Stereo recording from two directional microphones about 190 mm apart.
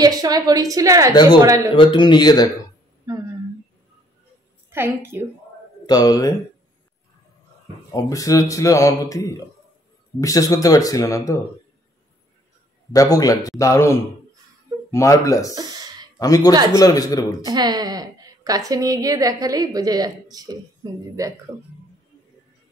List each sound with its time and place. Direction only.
0.0 s a woman's voice: 20° right (ahead or behind)
1.8 s speech: 25° left (ahead or behind)
4.6 s a woman's voice: 10° right (ahead or behind)
5.9 s speech: 20° left (ahead or behind)
7.9 s a man's voice: 15° left (ahead or behind)
12.9 s a man's voice: 20° left (ahead or behind)
15.5 s a sound: 20° right (ahead or behind)
16.2 s speech: 20° left (ahead or behind)
17.5 s a woman's voice: 20° right (ahead or behind)